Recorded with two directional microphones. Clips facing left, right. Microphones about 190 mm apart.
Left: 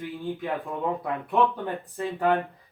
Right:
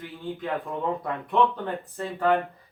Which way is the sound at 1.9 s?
15° left (ahead or behind).